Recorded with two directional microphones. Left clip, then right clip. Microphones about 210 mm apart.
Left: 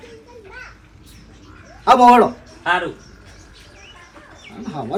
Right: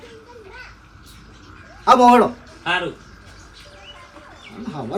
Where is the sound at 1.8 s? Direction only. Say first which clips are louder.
Left 2 dB; centre (ahead or behind).